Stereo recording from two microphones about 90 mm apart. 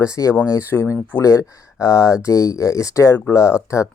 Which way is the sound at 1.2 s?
35° left (ahead or behind).